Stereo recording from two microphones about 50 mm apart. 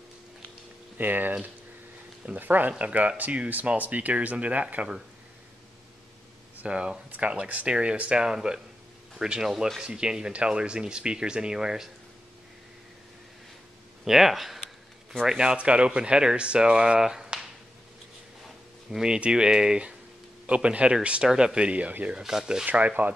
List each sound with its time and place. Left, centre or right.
0.9 s speech: right
6.6 s speech: right
14.0 s speech: centre
15.2 s speech: centre
18.9 s speech: centre
22.1 s speech: centre
22.7 s speech: right